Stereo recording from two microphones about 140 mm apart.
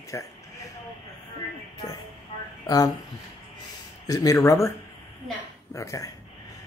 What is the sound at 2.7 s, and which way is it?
Speech, 30° left (ahead or behind).